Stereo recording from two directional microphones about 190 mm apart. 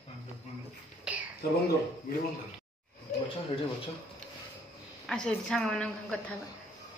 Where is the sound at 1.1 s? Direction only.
5° right (ahead or behind).